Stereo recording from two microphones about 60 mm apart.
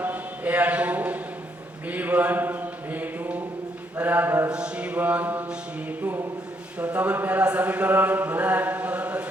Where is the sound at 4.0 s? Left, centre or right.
Right.